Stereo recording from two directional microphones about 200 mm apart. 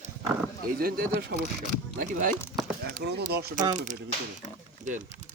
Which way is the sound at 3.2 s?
50° right (ahead or behind).